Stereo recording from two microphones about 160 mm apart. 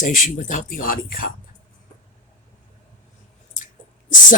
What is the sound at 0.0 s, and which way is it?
Speech, 55° left (ahead or behind).